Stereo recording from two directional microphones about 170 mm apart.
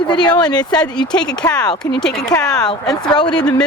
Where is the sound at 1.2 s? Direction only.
5° left (ahead or behind).